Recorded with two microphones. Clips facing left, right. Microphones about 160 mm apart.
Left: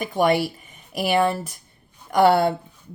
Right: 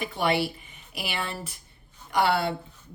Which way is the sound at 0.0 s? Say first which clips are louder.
Left 6 dB; 45° left (ahead or behind).